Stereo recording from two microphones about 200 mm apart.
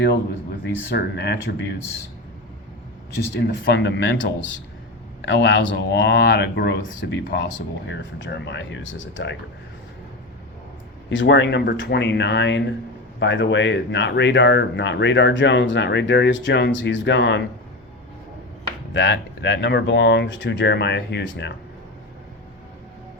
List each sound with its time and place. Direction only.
0.6 s speech: 55° left (ahead or behind)
3.4 s speech: 60° left (ahead or behind)
11.1 s speech: 65° left (ahead or behind)
18.9 s speech: 65° left (ahead or behind)